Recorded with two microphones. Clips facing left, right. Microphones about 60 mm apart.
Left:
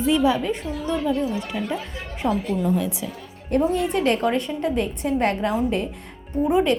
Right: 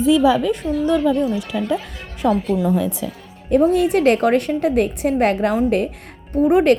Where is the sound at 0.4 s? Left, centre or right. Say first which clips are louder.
Right 7 dB; right.